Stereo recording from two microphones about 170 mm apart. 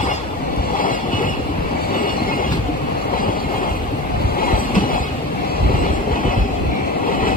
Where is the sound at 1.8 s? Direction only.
60° left (ahead or behind).